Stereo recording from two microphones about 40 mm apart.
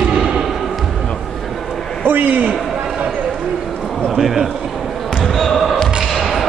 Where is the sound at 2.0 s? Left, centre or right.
Right.